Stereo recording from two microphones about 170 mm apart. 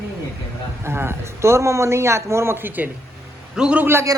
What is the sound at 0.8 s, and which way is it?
Speech, 15° right (ahead or behind).